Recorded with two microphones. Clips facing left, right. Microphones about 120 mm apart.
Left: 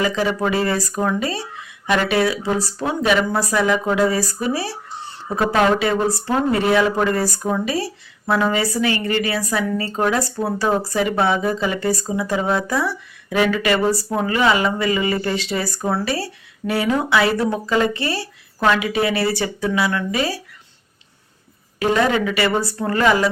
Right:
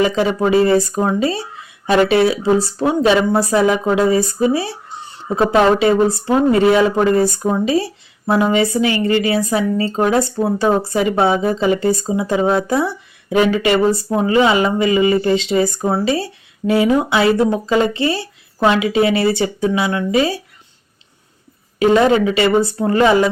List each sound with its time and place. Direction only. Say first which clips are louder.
0.0 s speech: right 4 dB; 25° right (ahead or behind)
21.8 s speech: right 6 dB; 25° right (ahead or behind)